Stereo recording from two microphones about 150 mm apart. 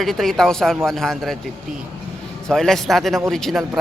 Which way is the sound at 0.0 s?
Centre (ahead or behind).